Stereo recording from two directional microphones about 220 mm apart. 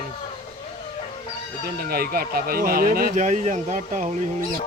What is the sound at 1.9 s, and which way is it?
Speech, 40° right (ahead or behind).